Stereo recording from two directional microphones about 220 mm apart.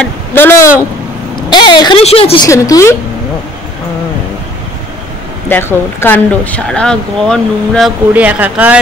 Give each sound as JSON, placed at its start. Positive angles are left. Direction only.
{"t": 0.0, "sound": "a sound", "side_deg": 10}
{"t": 1.5, "sound": "a woman's voice", "side_deg": 20}
{"t": 2.4, "sound": "speech", "side_deg": 15}
{"t": 5.5, "sound": "speech", "side_deg": 10}
{"t": 8.1, "sound": "speech", "side_deg": -5}